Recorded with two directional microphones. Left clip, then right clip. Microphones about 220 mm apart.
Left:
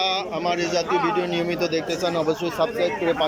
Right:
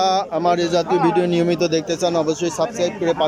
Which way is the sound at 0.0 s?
20° right (ahead or behind).